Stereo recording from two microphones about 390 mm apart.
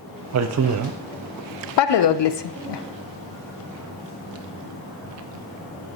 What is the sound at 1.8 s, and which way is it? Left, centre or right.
Speech, left.